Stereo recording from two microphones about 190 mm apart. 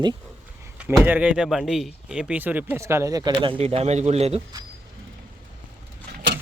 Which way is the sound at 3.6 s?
35° right (ahead or behind).